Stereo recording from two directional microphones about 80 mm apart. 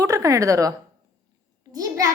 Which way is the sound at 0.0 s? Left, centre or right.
Right.